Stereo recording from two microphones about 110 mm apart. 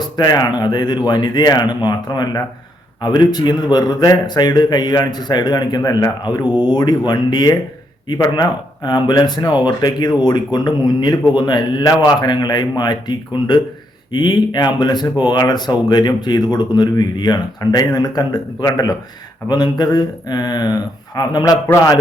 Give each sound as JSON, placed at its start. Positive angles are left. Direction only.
{"t": 0.2, "sound": "a man's voice", "side_deg": 40}